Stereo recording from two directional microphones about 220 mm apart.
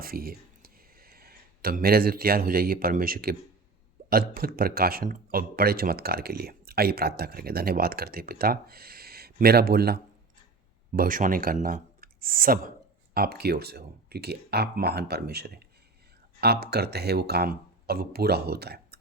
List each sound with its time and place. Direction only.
0.0 s a man's voice: 45° right (ahead or behind)